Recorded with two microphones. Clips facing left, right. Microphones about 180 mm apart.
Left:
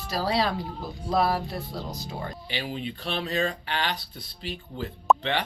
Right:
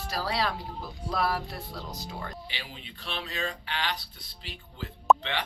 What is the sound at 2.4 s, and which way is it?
Speech, 50° left (ahead or behind).